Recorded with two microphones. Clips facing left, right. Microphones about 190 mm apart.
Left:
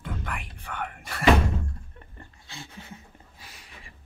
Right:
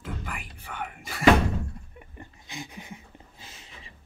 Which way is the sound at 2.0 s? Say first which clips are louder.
Right 3 dB; 15° right (ahead or behind).